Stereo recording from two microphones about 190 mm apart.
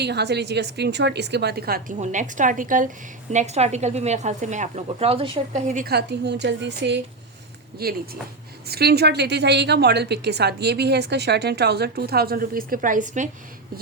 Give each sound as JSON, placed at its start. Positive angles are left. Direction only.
{"t": 0.0, "sound": "a woman's voice", "side_deg": -60}
{"t": 5.9, "sound": "a woman's voice", "side_deg": -60}
{"t": 7.8, "sound": "a woman's voice", "side_deg": -55}